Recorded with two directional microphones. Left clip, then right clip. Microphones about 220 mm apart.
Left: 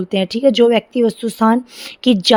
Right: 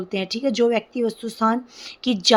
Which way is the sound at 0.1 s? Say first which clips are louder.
Left 10 dB; 35° left (ahead or behind).